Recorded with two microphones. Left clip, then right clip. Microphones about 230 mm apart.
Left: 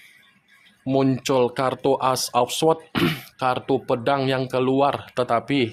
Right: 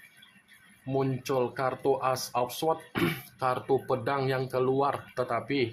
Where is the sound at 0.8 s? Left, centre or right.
Left.